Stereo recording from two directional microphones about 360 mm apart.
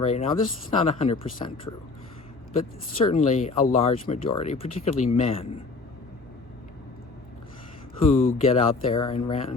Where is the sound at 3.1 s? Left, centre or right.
Centre.